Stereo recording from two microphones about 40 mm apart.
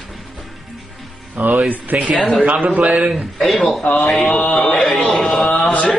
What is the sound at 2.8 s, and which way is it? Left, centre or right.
Speech, right.